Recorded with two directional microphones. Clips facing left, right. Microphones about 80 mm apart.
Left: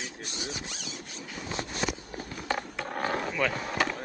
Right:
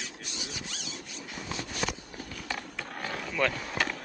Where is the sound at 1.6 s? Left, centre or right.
Left.